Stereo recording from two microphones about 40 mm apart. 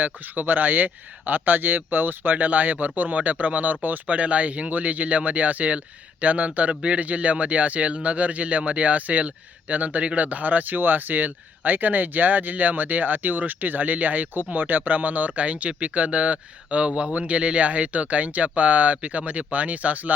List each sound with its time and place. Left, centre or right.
0.0 s speech: right
2.3 s speech: right